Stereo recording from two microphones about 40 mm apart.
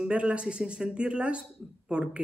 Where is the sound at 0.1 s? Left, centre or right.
Right.